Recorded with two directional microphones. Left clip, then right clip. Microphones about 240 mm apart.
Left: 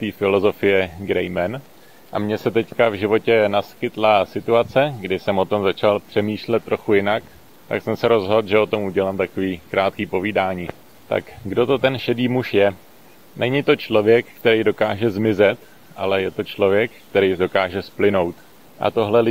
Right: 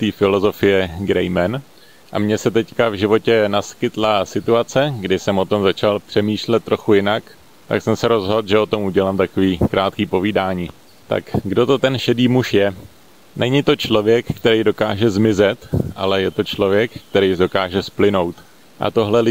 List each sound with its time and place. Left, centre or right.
0.0 s speech: right